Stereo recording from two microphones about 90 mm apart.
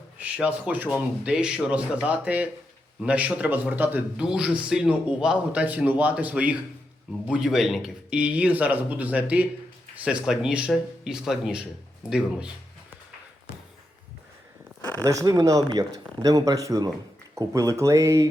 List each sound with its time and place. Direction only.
0.2 s a man's voice: 15° right (ahead or behind)
4.2 s a man's voice: 10° right (ahead or behind)
15.0 s speech: 40° right (ahead or behind)